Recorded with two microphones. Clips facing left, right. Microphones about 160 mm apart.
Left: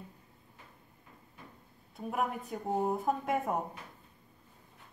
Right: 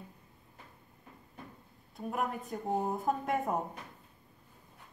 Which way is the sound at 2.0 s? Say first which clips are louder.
Left 1 dB; centre (ahead or behind).